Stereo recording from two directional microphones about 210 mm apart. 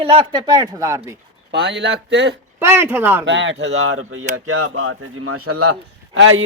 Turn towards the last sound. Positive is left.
turn(degrees=-70)  # may be behind; listen again after turning